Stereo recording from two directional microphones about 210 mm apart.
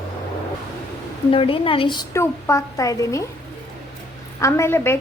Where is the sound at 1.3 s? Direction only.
25° left (ahead or behind).